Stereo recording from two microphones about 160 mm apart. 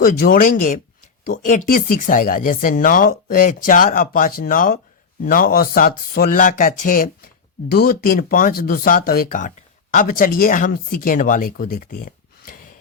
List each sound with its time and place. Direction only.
0.0 s speech: 60° left (ahead or behind)
7.7 s speech: 75° left (ahead or behind)